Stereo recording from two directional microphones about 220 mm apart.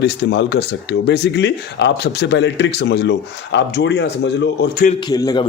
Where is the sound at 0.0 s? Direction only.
50° left (ahead or behind).